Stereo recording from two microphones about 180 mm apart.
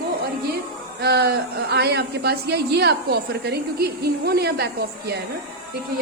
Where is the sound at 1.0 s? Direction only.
65° right (ahead or behind).